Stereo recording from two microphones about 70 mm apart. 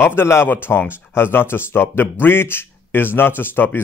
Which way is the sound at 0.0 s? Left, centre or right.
Left.